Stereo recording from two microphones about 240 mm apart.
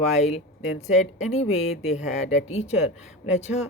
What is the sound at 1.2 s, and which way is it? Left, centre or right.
Speech, left.